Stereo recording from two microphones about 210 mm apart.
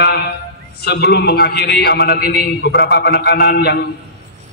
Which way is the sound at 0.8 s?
50° left (ahead or behind).